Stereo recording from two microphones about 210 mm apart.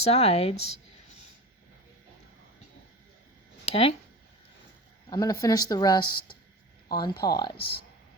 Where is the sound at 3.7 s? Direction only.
30° left (ahead or behind).